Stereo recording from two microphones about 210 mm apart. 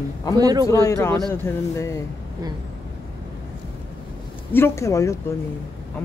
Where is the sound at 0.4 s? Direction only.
20° right (ahead or behind).